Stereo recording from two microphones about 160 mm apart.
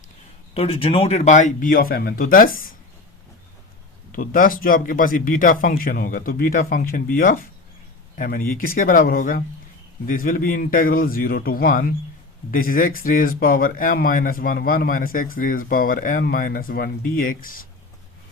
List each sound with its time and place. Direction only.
0.5 s speech: 35° left (ahead or behind); by 2.7 s 60° left (ahead or behind)
4.1 s speech: 60° left (ahead or behind)